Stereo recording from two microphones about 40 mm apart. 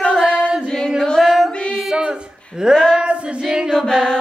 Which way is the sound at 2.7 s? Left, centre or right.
Centre.